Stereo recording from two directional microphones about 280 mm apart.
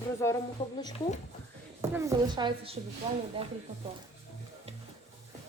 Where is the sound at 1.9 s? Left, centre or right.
Centre.